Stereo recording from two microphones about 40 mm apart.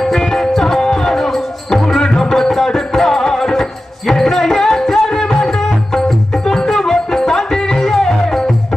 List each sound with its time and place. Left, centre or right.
0.0 s music: centre